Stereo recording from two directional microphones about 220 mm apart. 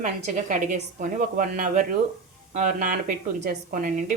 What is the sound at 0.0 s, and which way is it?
A woman's voice, 35° right (ahead or behind).